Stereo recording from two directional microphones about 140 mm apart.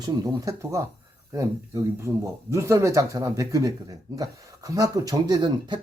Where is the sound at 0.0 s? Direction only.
25° right (ahead or behind).